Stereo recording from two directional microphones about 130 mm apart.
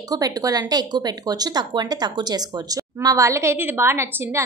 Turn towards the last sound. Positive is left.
turn(degrees=-20)  # may be behind; listen again after turning